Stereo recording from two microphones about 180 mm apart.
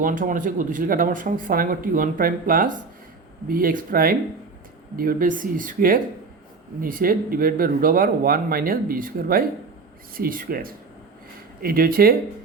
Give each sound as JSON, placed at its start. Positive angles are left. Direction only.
{"t": 0.0, "sound": "speech", "side_deg": -45}